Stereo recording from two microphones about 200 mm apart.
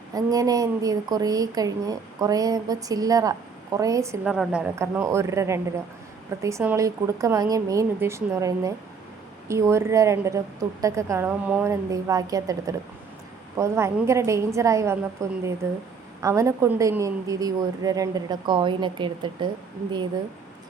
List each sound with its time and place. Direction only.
0.1 s a woman's voice: 20° right (ahead or behind)